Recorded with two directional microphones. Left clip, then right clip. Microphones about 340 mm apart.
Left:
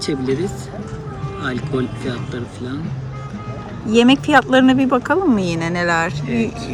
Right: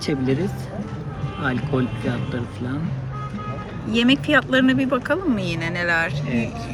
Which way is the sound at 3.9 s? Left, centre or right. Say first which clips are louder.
Left 5 dB; left.